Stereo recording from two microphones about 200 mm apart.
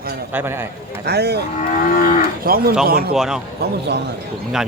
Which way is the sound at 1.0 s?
55° right (ahead or behind).